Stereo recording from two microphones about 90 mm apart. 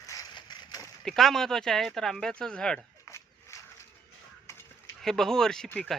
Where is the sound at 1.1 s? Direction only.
5° left (ahead or behind).